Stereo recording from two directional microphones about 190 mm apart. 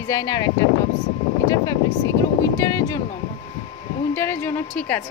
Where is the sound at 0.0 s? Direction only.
15° left (ahead or behind).